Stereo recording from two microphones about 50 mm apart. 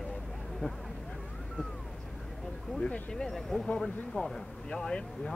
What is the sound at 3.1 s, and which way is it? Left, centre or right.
Speech, centre.